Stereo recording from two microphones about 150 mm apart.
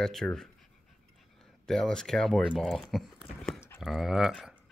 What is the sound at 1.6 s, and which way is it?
Speech, 5° left (ahead or behind).